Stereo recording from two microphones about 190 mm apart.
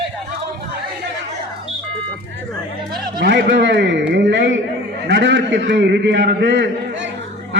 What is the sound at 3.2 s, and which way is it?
A man's voice, 60° right (ahead or behind).